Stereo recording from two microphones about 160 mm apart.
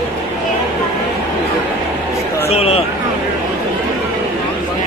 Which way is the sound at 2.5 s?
40° left (ahead or behind).